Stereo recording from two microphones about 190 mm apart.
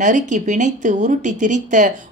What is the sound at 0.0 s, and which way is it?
Speech, 40° right (ahead or behind).